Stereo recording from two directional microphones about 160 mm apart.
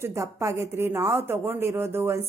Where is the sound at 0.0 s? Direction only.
20° right (ahead or behind).